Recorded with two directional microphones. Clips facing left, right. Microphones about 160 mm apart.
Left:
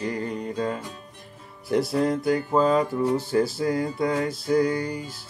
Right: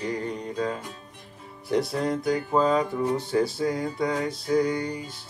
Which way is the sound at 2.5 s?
Centre (ahead or behind).